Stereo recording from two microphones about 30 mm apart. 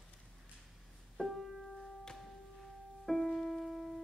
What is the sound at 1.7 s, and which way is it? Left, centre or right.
Music, centre.